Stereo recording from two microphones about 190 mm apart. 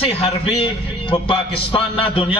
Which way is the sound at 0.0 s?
30° left (ahead or behind).